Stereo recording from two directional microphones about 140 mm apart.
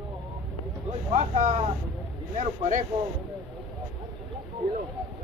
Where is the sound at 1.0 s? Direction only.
50° right (ahead or behind).